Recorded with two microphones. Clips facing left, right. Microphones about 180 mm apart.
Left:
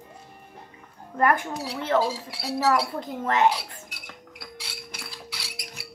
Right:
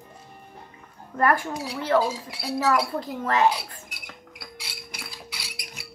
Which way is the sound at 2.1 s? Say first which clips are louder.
Right 1 dB; 35° left (ahead or behind).